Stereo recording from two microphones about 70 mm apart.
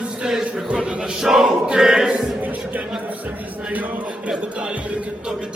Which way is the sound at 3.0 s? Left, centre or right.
Right.